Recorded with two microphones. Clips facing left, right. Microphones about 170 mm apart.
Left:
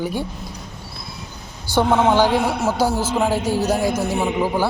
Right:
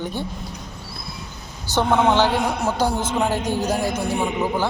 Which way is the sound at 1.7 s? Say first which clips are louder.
Left 2 dB; 10° left (ahead or behind).